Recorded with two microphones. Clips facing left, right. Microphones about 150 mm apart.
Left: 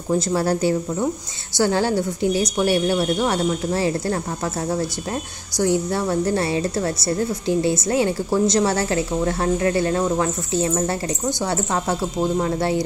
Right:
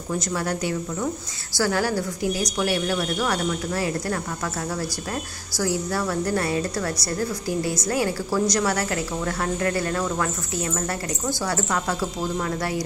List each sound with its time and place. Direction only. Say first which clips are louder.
0.1 s a woman's voice: left 7 dB; 30° left (ahead or behind)
5.6 s a woman's voice: left 5 dB; 25° left (ahead or behind)